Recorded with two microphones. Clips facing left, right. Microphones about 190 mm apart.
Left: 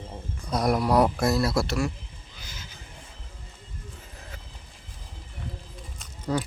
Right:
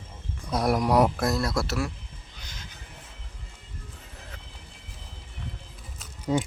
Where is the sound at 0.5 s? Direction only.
5° right (ahead or behind).